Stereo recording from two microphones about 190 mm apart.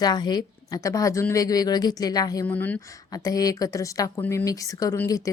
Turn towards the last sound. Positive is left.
turn(degrees=15)  # may be behind; listen again after turning